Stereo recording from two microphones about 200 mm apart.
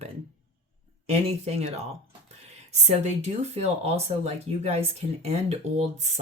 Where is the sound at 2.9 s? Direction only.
35° right (ahead or behind).